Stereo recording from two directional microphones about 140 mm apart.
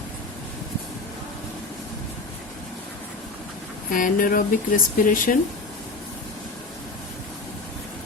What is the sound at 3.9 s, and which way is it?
Speech, 75° left (ahead or behind).